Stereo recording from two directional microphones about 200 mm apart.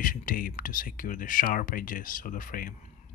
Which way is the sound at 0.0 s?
45° left (ahead or behind).